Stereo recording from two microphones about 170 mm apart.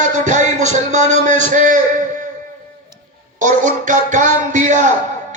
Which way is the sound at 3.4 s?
50° right (ahead or behind).